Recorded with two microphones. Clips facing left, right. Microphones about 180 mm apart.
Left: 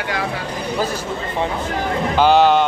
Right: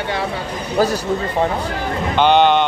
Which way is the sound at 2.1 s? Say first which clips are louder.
Even; 5° left (ahead or behind).